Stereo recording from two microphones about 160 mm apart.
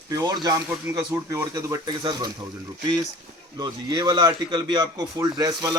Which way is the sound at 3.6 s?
25° right (ahead or behind).